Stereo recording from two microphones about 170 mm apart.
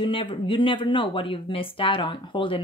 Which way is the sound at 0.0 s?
30° left (ahead or behind).